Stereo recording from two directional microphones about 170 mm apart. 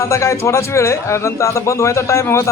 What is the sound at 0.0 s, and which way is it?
A man's voice, 15° left (ahead or behind).